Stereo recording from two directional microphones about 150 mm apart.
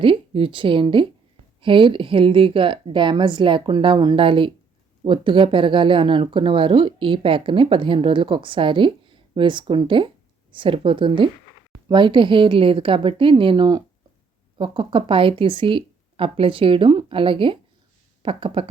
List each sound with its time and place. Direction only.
0.0 s speech: 35° right (ahead or behind)